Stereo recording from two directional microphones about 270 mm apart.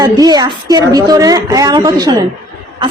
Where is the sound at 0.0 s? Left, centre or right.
Centre.